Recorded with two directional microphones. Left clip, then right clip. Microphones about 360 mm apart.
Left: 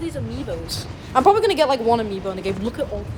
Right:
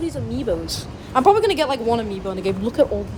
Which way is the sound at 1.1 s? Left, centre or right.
Centre.